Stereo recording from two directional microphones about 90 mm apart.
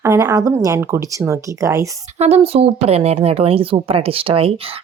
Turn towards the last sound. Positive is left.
turn(degrees=-90)